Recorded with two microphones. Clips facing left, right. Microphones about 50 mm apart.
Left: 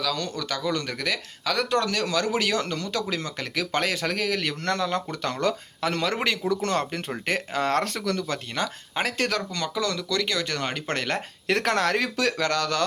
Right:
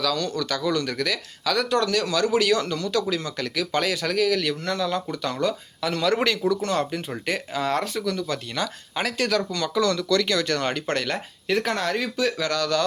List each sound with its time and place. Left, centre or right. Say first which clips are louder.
0.0 s speech: right 3 dB; left
8.3 s speech: right 1 dB; left
9.7 s speech: right 6 dB; centre
10.8 s speech: right 1 dB; left
11.4 s speech: left 1 dB; left
12.4 s speech: right 1 dB; left